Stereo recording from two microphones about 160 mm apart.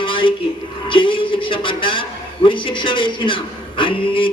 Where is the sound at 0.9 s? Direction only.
30° left (ahead or behind).